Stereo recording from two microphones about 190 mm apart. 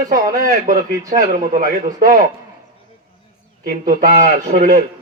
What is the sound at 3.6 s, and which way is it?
A man's voice, 45° right (ahead or behind).